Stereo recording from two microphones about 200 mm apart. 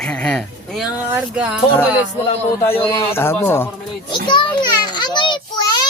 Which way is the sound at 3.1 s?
10° left (ahead or behind).